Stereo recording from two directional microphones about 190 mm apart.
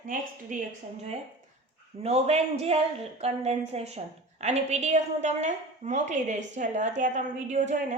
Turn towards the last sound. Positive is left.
turn(degrees=-40)  # may be behind; listen again after turning